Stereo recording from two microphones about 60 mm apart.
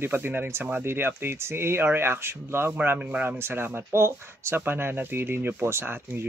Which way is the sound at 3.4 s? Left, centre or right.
Right.